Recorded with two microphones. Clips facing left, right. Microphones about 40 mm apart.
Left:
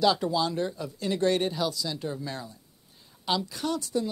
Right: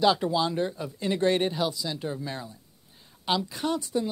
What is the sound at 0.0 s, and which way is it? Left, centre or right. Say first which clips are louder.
Speech: right 1 dB; centre.